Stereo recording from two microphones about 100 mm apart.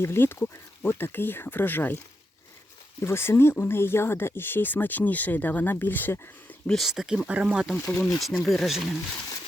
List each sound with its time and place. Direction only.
0.0 s speech: 25° left (ahead or behind)
3.0 s speech: 25° left (ahead or behind)
6.7 s speech: centre (ahead or behind)
7.9 s speech: 10° left (ahead or behind)
8.2 s speech: centre (ahead or behind)